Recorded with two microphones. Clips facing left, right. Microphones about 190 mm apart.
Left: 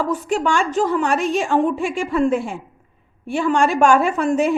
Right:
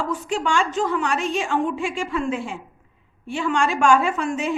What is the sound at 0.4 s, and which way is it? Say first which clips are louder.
A woman's voice: left 2 dB; 40° left (ahead or behind).